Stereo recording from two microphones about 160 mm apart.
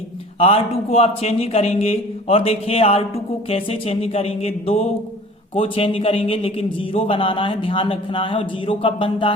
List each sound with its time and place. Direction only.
0.3 s a man's voice: 40° left (ahead or behind)